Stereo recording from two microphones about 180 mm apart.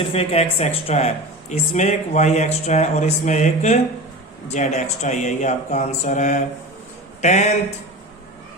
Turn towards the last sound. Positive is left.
turn(degrees=40)  # may be behind; listen again after turning